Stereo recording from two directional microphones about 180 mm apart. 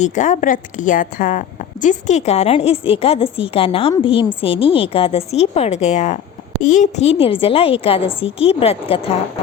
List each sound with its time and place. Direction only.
0.0 s a woman's voice: 45° left (ahead or behind)